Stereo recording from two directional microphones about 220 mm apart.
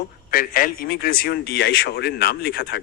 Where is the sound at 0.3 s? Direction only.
40° left (ahead or behind).